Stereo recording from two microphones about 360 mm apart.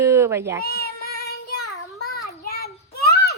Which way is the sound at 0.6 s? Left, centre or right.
Left.